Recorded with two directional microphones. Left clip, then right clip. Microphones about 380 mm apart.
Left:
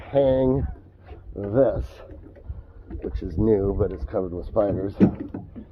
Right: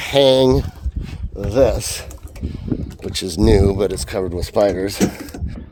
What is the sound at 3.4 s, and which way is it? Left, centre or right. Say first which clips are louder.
Speech: right 6 dB; right.